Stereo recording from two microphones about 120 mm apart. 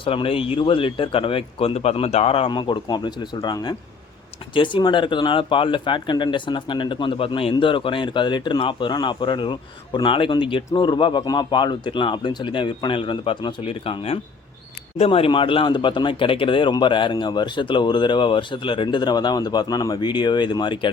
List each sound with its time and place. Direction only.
0.0 s speech: 50° left (ahead or behind)
2.5 s a man's voice: 40° left (ahead or behind)